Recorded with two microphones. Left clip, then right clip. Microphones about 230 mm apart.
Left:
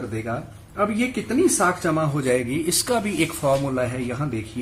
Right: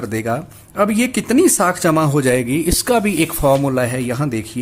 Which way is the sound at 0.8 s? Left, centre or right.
Right.